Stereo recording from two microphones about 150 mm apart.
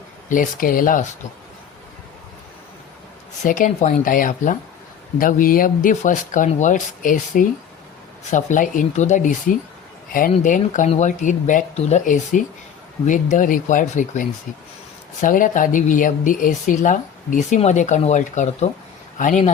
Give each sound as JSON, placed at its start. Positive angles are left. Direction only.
{"t": 0.3, "sound": "speech", "side_deg": 65}
{"t": 3.4, "sound": "speech", "side_deg": 60}
{"t": 10.1, "sound": "speech", "side_deg": 70}